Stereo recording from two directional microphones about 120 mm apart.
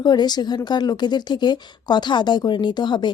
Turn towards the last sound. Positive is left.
turn(degrees=40)  # may be behind; listen again after turning